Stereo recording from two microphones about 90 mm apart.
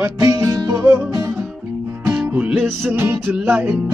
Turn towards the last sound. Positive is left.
turn(degrees=-20)  # may be behind; listen again after turning